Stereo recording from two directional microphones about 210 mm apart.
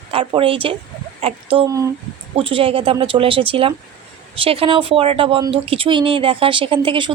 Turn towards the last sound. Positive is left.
turn(degrees=-25)  # may be behind; listen again after turning